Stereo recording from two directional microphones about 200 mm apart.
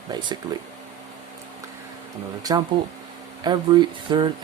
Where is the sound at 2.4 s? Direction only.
20° right (ahead or behind).